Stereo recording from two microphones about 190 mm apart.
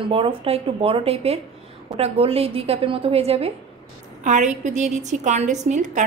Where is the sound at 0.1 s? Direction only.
30° right (ahead or behind).